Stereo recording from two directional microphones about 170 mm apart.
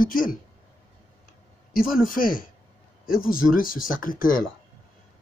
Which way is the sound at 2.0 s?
55° left (ahead or behind).